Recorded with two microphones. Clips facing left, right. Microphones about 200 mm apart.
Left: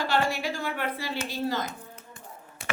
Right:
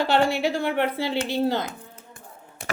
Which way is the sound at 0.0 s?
65° right (ahead or behind).